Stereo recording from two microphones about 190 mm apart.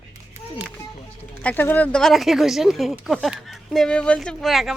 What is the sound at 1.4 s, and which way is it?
Speech, 10° left (ahead or behind).